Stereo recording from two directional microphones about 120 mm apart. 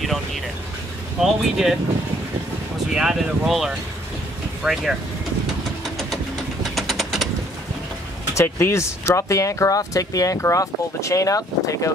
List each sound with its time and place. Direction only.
1.2 s speech: centre (ahead or behind)
2.9 s speech: 5° right (ahead or behind)
6.6 s typing: centre (ahead or behind)
8.4 s speech: 20° left (ahead or behind)